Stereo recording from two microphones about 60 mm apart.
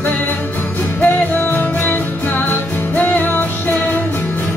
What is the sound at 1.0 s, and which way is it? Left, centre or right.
Music, left.